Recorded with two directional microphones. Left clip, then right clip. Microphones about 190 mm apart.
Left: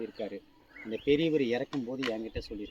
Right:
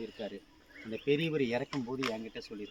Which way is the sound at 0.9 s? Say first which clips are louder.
Left 4 dB; 40° right (ahead or behind).